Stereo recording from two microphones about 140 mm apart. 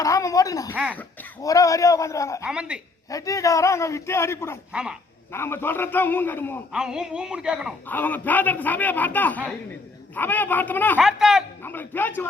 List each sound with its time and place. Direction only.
0.0 s a sound: 25° left (ahead or behind)
0.7 s a woman's voice: 10° right (ahead or behind)
1.4 s a man's voice: 25° left (ahead or behind)
2.4 s a woman's voice: 5° right (ahead or behind)
3.1 s a man's voice: 25° left (ahead or behind)
4.7 s speech: 5° right (ahead or behind)
5.3 s a man's voice: 15° left (ahead or behind)
6.7 s speech: 5° right (ahead or behind)
7.9 s a man's voice: 10° left (ahead or behind)
10.9 s speech: 5° right (ahead or behind)
11.6 s a man's voice: 15° left (ahead or behind)